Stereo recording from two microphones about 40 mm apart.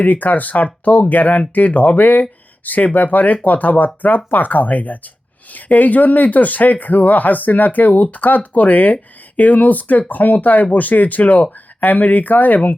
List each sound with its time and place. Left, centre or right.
0.0 s speech: left